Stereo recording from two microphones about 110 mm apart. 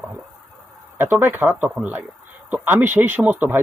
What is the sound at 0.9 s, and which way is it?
Speech, 20° right (ahead or behind).